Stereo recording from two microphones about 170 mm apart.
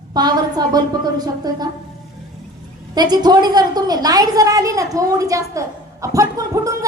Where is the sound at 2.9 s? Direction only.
25° right (ahead or behind).